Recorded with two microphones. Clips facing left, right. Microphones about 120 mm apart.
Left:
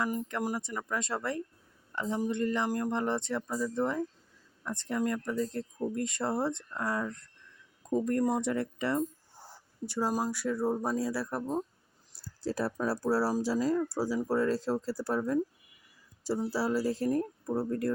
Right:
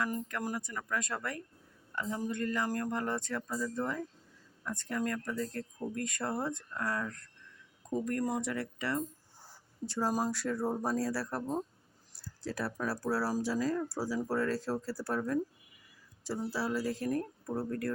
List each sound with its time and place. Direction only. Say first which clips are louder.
0.0 s speech: left 3 dB; 25° left (ahead or behind)
9.8 s speech: left 1 dB; 10° left (ahead or behind)
12.4 s speech: left 4 dB; 35° left (ahead or behind)